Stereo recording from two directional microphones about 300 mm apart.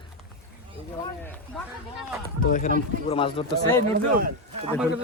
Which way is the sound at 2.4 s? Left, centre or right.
Left.